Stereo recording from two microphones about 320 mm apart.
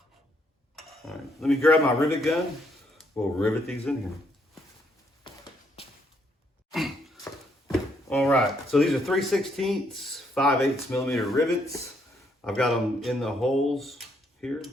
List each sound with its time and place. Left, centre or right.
0.8 s speech: centre
6.7 s a sound: centre
7.7 s speech: centre